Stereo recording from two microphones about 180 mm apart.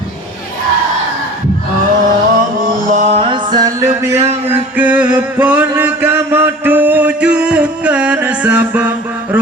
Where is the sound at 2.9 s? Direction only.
40° right (ahead or behind).